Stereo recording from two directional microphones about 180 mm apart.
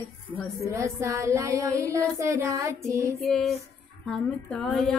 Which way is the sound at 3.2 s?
Centre (ahead or behind).